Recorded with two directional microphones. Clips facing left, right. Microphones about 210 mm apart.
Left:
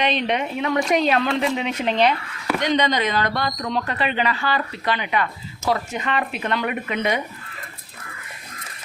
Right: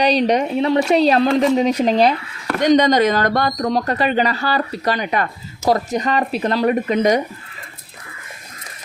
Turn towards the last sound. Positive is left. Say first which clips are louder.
# right 8 dB
turn(degrees=-40)  # may be behind; listen again after turning